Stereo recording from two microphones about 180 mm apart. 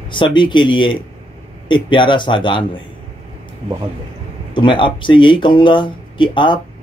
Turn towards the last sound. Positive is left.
turn(degrees=25)  # may be behind; listen again after turning